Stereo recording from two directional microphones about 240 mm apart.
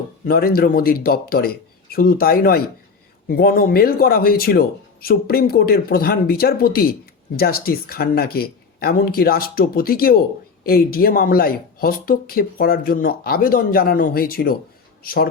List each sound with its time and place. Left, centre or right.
0.3 s speech: left